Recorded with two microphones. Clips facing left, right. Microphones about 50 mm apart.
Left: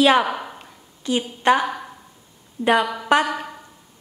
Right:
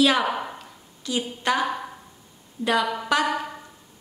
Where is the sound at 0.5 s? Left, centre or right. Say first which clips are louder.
Even; left.